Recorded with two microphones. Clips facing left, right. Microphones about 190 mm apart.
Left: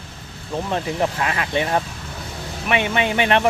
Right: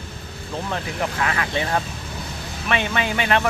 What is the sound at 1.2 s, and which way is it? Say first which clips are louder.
Speech: left 2 dB; 20° left (ahead or behind).